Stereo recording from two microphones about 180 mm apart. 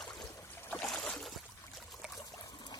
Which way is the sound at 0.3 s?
15° left (ahead or behind).